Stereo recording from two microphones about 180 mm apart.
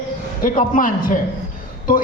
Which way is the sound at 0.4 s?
50° left (ahead or behind).